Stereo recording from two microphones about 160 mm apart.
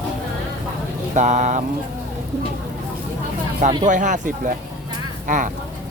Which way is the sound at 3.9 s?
50° right (ahead or behind).